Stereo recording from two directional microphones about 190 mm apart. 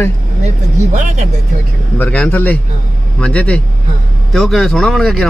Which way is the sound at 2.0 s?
5° left (ahead or behind).